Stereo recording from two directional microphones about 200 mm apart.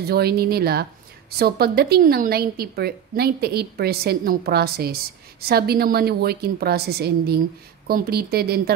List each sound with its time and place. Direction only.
0.0 s a woman's voice: 50° right (ahead or behind)